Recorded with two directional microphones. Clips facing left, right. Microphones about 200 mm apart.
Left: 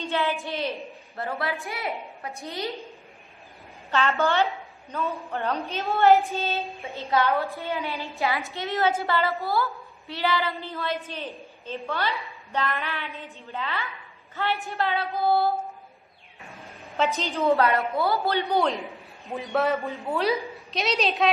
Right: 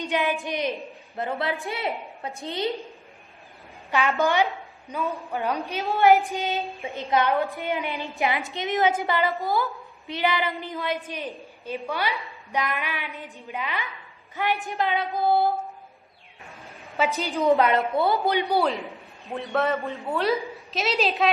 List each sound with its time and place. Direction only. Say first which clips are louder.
0.0 s a woman's voice: right 1 dB; 15° right (ahead or behind)
3.9 s a woman's voice: right 1 dB; 15° right (ahead or behind)
16.8 s a sound: even; centre (ahead or behind)
17.2 s a woman's voice: right 2 dB; 15° right (ahead or behind)
18.6 s a woman's voice: even; centre (ahead or behind)